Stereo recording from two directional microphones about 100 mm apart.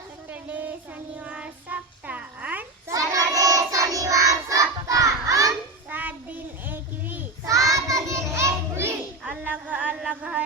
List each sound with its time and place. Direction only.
0.3 s child singing: 15° right (ahead or behind)
2.9 s child singing: 35° right (ahead or behind)
5.9 s child singing: 15° right (ahead or behind)
7.4 s child singing: 35° right (ahead or behind)
9.2 s a sound: 15° right (ahead or behind)